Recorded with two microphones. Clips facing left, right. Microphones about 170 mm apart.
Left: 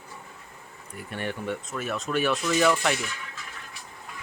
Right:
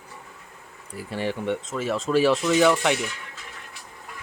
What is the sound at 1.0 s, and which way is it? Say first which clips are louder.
Speech: right 5 dB; 30° right (ahead or behind).